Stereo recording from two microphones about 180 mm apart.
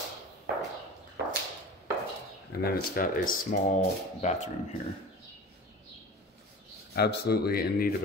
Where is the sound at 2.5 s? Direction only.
60° left (ahead or behind).